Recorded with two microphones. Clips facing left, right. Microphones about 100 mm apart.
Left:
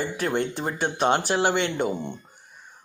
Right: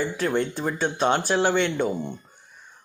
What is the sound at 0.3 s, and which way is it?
Speech, 55° left (ahead or behind).